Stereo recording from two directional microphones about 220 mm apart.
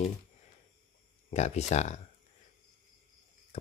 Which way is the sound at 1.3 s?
30° left (ahead or behind).